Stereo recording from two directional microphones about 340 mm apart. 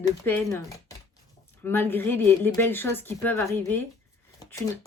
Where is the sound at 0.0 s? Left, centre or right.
Centre.